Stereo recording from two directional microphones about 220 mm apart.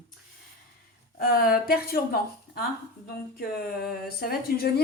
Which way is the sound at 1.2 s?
40° left (ahead or behind).